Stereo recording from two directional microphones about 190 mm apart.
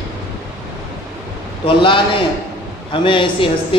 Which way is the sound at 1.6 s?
25° left (ahead or behind).